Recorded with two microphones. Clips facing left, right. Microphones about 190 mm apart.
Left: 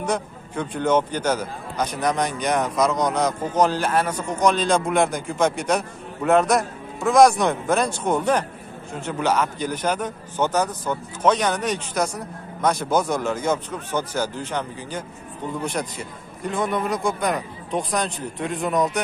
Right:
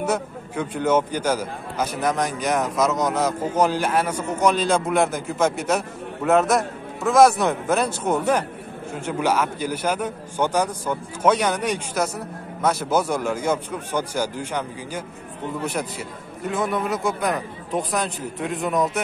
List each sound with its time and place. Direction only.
0.0 s a man's voice: 5° right (ahead or behind)